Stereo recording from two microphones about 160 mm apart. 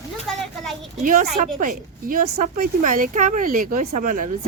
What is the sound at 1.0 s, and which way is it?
A woman's voice, 60° right (ahead or behind).